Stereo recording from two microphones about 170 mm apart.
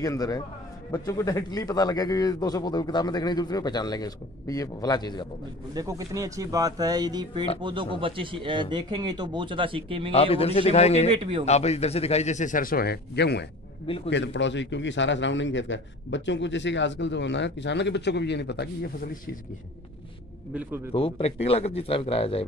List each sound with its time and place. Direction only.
0.0 s speech: 20° left (ahead or behind)
5.8 s a man's voice: 20° right (ahead or behind)
10.1 s speech: 35° left (ahead or behind)
11.1 s speech: 35° right (ahead or behind)
11.4 s a man's voice: 40° left (ahead or behind); by 19.3 s 65° left (ahead or behind)
20.9 s speech: 35° left (ahead or behind)